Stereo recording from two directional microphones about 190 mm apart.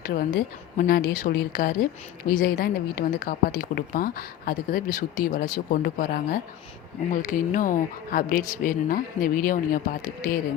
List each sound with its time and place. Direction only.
0.1 s a woman's voice: 50° left (ahead or behind)